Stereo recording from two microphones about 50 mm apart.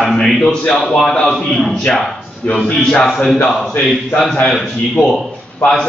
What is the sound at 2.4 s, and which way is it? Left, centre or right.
Speech, centre.